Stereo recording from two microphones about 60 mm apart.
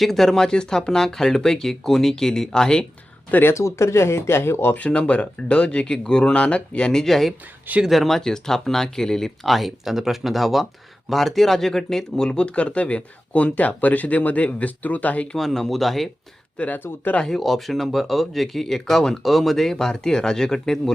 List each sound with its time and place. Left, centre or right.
0.0 s speech: centre
3.5 s speech: left
4.7 s speech: left
7.0 s speech: centre; by 15.3 s left
15.4 s speech: centre
16.6 s speech: left
17.2 s speech: centre